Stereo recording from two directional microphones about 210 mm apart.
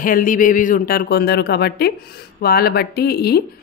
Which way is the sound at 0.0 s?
40° left (ahead or behind).